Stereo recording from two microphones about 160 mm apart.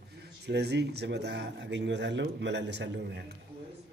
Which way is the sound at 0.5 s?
90° right.